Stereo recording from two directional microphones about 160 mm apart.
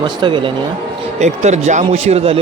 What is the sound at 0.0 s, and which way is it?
Speech, 30° right (ahead or behind).